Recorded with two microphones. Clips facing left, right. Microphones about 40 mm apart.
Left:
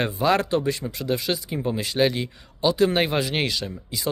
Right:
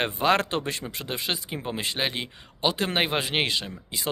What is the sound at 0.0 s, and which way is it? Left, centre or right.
Speech, right.